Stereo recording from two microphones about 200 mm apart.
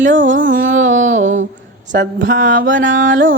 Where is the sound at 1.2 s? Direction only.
70° right (ahead or behind).